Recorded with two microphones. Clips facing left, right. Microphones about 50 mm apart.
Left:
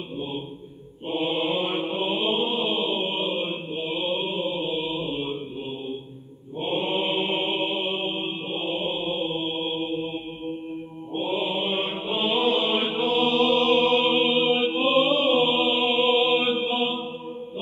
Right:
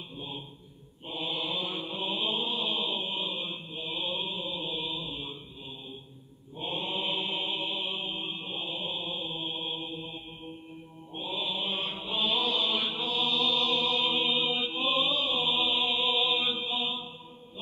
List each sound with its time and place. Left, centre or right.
1.0 s mantra: left
6.6 s mantra: left
11.1 s chant: left